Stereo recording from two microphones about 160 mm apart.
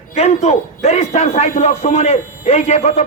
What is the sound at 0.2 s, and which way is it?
Speech, 45° left (ahead or behind).